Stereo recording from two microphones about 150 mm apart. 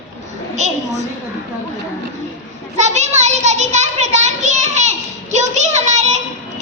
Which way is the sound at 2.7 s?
50° right (ahead or behind).